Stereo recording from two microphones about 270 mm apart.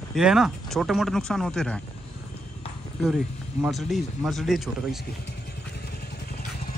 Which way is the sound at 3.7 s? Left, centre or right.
Centre.